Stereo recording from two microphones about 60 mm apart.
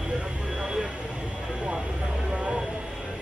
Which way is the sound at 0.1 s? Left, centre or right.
Centre.